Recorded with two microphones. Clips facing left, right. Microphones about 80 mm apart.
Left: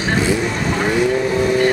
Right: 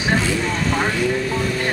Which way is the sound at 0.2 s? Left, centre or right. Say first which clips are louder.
Left 3 dB; centre.